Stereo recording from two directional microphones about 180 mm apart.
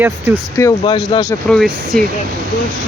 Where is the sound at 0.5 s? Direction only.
15° left (ahead or behind).